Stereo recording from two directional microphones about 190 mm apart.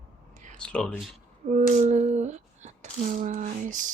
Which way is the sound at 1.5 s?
35° right (ahead or behind).